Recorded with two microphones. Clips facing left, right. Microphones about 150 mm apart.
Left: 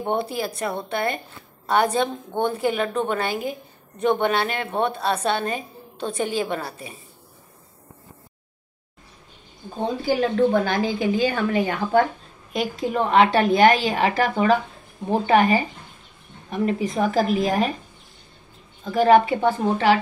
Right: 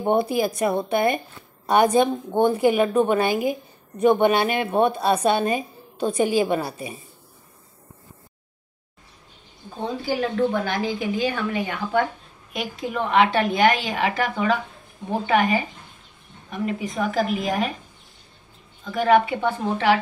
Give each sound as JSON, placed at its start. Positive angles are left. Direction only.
{"t": 0.0, "sound": "a woman's voice", "side_deg": -15}
{"t": 10.3, "sound": "a woman's voice", "side_deg": 35}
{"t": 18.9, "sound": "a woman's voice", "side_deg": 35}